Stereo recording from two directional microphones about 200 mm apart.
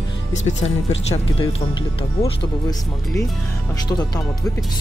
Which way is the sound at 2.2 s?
15° left (ahead or behind).